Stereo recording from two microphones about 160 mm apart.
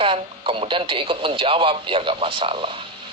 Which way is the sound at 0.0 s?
35° right (ahead or behind).